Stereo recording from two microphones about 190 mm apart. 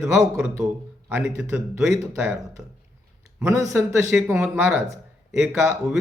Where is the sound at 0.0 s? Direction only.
15° right (ahead or behind).